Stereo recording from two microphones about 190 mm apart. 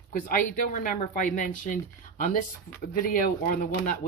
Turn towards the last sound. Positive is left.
turn(degrees=45)  # may be behind; listen again after turning